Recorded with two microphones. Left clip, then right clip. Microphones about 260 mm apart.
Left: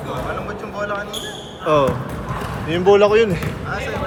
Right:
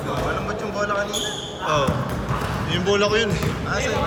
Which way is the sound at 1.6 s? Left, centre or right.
Left.